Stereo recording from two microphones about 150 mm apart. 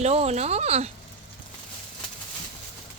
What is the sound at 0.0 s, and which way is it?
Speech, 45° right (ahead or behind).